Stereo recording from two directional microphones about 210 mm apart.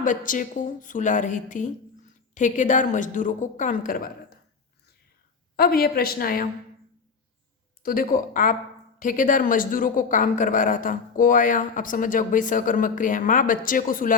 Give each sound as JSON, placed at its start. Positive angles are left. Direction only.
{"t": 0.0, "sound": "a woman's voice", "side_deg": 40}
{"t": 5.5, "sound": "a woman's voice", "side_deg": 45}
{"t": 7.8, "sound": "a woman's voice", "side_deg": 45}